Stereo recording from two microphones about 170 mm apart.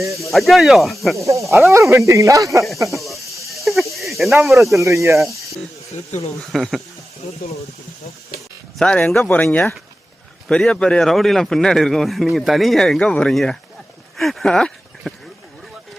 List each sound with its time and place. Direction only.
0.2 s a man's voice: centre (ahead or behind)
1.1 s speech: 20° right (ahead or behind)
3.5 s cricket: centre (ahead or behind)
4.7 s speech: 15° right (ahead or behind)
6.5 s a man's voice: centre (ahead or behind)
8.8 s a man's voice: 5° left (ahead or behind)